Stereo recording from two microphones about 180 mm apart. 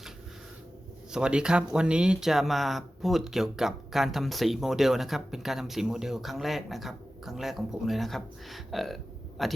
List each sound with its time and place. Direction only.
1.1 s speech: 5° right (ahead or behind)